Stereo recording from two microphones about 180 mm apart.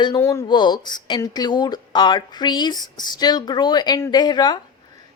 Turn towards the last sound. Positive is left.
turn(degrees=25)  # may be behind; listen again after turning